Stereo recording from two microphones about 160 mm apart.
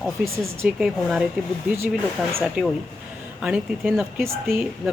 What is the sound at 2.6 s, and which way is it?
Speech, 5° right (ahead or behind).